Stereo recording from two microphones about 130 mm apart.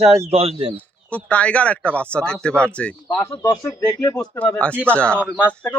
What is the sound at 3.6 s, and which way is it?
Speech, 20° left (ahead or behind).